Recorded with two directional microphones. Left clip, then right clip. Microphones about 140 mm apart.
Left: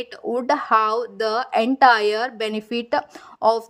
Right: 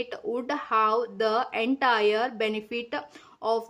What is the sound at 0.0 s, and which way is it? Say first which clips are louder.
A woman's voice: left 6 dB; 35° left (ahead or behind).